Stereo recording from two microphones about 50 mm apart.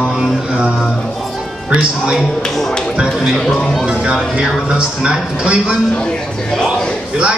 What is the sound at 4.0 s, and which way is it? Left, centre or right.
A man's voice, centre.